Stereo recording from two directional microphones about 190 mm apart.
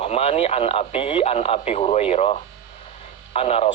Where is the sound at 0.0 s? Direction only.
30° left (ahead or behind).